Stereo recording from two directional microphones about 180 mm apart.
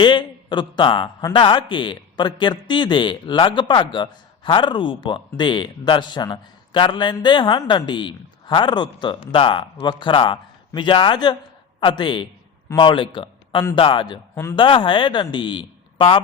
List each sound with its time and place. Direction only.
0.0 s a man's voice: 25° left (ahead or behind)